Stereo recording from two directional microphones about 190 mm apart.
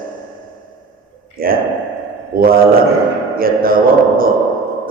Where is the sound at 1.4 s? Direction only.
50° right (ahead or behind).